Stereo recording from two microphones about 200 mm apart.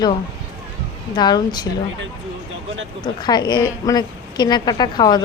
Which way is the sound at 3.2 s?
20° left (ahead or behind).